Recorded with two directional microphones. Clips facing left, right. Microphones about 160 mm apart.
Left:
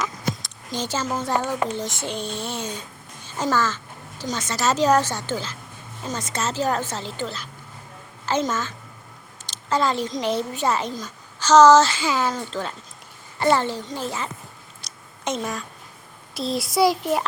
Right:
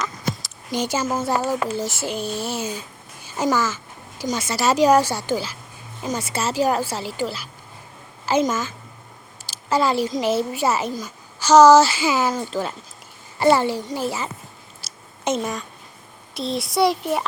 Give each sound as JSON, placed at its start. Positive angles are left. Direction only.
{"t": 0.7, "sound": "a woman's voice", "side_deg": -10}
{"t": 14.8, "sound": "a sound", "side_deg": -5}
{"t": 16.3, "sound": "a child's voice", "side_deg": 0}